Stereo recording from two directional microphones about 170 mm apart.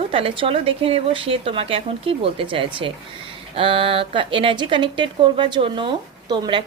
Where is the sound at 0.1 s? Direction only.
35° right (ahead or behind).